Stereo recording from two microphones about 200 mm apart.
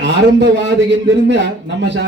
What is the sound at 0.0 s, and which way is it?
A man's voice, 60° right (ahead or behind).